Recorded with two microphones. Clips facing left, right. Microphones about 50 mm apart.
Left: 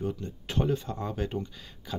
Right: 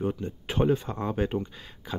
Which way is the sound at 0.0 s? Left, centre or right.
Right.